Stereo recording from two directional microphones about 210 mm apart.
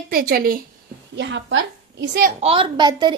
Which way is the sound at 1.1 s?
60° right (ahead or behind).